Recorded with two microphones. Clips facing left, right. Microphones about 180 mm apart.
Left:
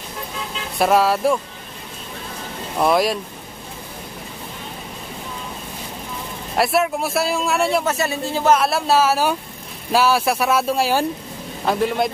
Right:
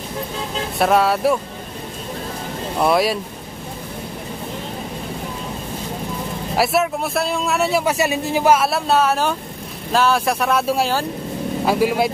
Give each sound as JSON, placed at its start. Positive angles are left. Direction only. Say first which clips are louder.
{"t": 0.7, "sound": "a man's voice", "louder": "even", "side_deg": 0}
{"t": 2.8, "sound": "a man's voice", "louder": "even", "side_deg": 0}
{"t": 6.5, "sound": "a man's voice", "louder": "even", "side_deg": 0}